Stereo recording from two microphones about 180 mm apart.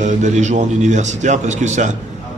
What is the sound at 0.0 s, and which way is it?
A man's voice, 40° right (ahead or behind).